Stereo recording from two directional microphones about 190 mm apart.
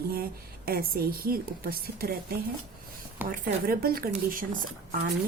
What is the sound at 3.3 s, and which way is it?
A woman's voice, 50° right (ahead or behind).